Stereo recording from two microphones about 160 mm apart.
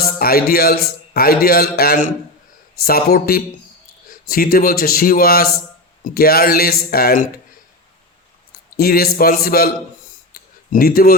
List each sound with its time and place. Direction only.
0.0 s a man's voice: 70° left (ahead or behind)
8.7 s a man's voice: 70° left (ahead or behind)